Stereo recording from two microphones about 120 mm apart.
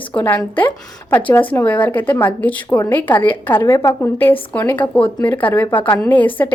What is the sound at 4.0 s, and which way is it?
A woman's voice, 15° left (ahead or behind).